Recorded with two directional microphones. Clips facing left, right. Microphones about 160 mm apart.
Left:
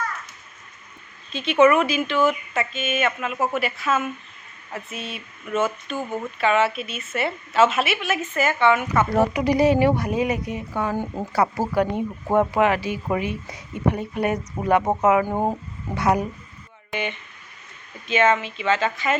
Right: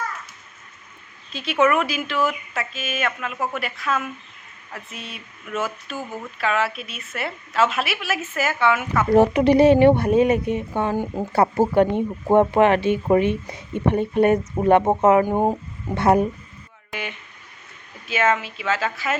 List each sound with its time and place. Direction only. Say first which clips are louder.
1.3 s speech: left 3 dB; centre (ahead or behind)
9.1 s speech: right 7 dB; 25° right (ahead or behind)
15.3 s speech: right 3 dB; 15° right (ahead or behind)
16.0 s speech: right 4 dB; 25° right (ahead or behind)
16.9 s speech: left 4 dB; centre (ahead or behind)